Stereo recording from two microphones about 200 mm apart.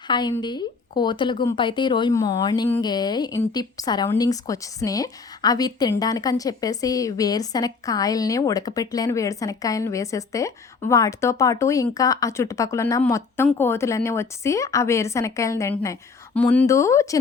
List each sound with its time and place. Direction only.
0.1 s speech: 20° left (ahead or behind)